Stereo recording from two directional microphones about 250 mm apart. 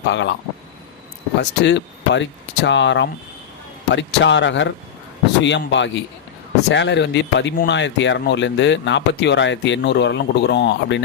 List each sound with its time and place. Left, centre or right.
0.0 s speech: left
1.4 s speech: left